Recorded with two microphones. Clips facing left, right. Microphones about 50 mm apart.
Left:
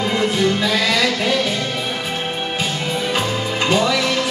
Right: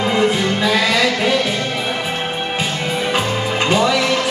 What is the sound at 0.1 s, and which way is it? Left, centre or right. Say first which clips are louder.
Music: even; centre.